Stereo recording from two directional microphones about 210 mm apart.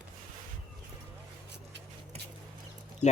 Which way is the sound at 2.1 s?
30° right (ahead or behind).